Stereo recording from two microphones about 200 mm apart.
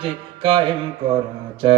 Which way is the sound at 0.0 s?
25° right (ahead or behind).